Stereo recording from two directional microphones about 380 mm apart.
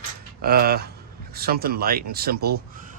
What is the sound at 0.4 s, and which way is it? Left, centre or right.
Speech, right.